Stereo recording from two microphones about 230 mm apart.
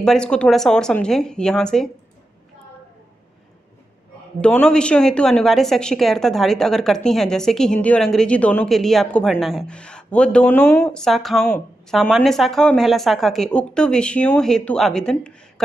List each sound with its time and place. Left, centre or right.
0.0 s a woman's voice: centre
4.4 s a woman's voice: centre